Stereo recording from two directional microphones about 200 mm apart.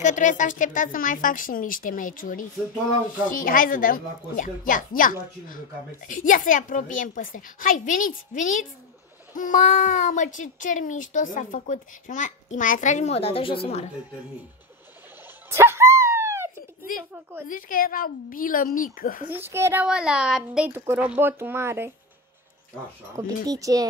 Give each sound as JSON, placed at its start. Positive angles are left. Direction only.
{"t": 0.0, "sound": "a child's voice", "side_deg": 40}
{"t": 15.5, "sound": "dog", "side_deg": -10}
{"t": 17.1, "sound": "a sound", "side_deg": -10}
{"t": 17.5, "sound": "speech", "side_deg": 40}
{"t": 19.2, "sound": "a woman's voice", "side_deg": -10}
{"t": 23.1, "sound": "a woman's voice", "side_deg": -15}